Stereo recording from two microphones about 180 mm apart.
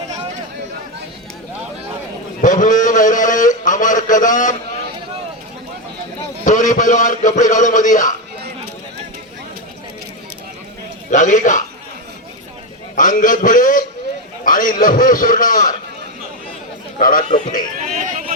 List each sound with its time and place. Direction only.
2.4 s a sound: 45° left (ahead or behind)
6.4 s a man's voice: 45° left (ahead or behind)
11.1 s a man's voice: 45° left (ahead or behind)
13.0 s a man's voice: 45° left (ahead or behind)
17.0 s a man's voice: 50° left (ahead or behind)